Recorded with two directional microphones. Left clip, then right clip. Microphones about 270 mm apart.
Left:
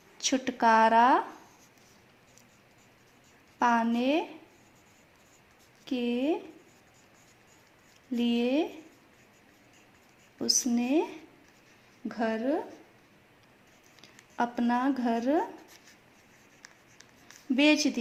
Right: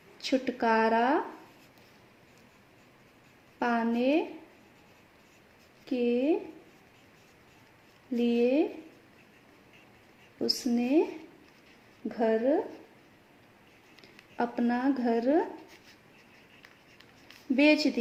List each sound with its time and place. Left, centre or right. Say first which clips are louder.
0.2 s a woman's voice: left 2 dB; left
3.6 s a woman's voice: left 2 dB; left
5.8 s a woman's voice: right 3 dB; left
8.1 s a woman's voice: right 2 dB; left
10.4 s a woman's voice: left 1 dB; left
12.0 s a woman's voice: right 4 dB; left
14.0 s speech: left 1 dB; left
17.6 s a woman's voice: right 1 dB; left